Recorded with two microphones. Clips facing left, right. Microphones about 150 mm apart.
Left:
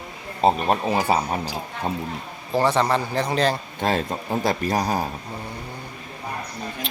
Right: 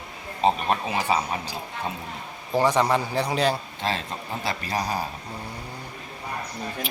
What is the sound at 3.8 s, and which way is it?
Speech, 50° left (ahead or behind).